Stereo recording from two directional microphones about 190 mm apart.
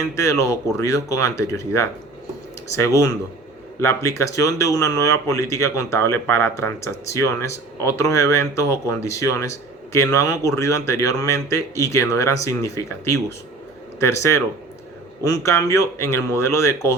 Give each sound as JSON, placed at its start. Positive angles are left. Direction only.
{"t": 0.2, "sound": "speech", "side_deg": 15}